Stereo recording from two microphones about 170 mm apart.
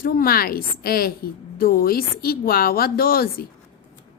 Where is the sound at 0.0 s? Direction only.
60° left (ahead or behind).